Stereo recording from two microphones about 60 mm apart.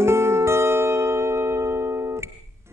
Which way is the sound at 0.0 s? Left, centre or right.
Right.